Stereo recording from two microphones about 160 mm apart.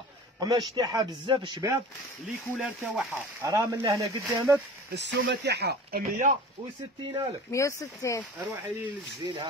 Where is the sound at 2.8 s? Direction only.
5° right (ahead or behind).